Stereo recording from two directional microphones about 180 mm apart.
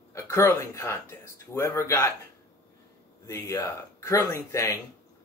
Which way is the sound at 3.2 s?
15° left (ahead or behind).